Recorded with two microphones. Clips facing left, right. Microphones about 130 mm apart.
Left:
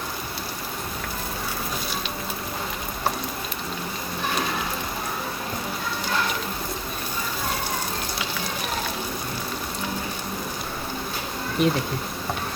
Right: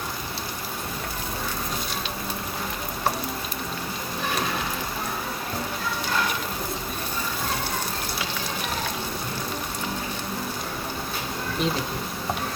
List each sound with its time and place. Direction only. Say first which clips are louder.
11.6 s speech: left 5 dB; 55° left (ahead or behind)